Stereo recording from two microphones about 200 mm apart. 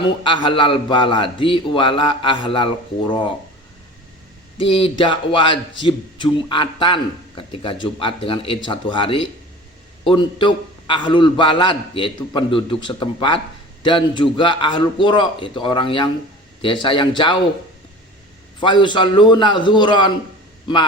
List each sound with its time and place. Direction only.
0.0 s a man's voice: 25° left (ahead or behind)
4.5 s a man's voice: 25° left (ahead or behind)
18.6 s a man's voice: 25° left (ahead or behind)